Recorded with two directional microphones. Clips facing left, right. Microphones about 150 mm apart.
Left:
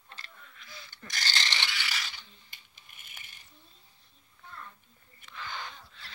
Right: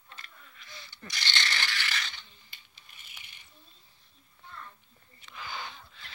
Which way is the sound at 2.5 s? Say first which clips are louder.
Even; 50° left (ahead or behind).